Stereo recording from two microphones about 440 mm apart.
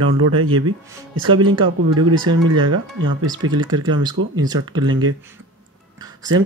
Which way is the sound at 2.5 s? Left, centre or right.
Right.